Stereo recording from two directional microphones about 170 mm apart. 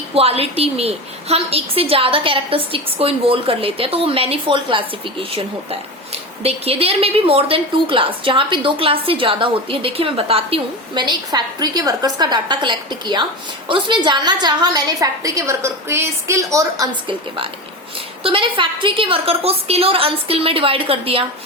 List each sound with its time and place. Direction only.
0.1 s a woman's voice: 35° right (ahead or behind)